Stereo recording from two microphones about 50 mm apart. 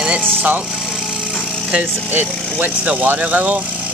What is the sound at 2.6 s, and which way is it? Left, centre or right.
Speech, right.